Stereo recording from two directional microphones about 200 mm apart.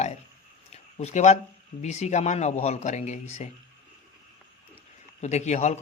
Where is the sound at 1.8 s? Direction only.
35° left (ahead or behind).